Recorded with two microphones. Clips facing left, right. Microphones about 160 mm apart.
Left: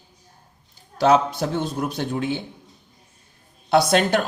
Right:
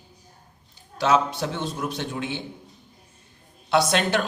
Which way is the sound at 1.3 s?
40° left (ahead or behind).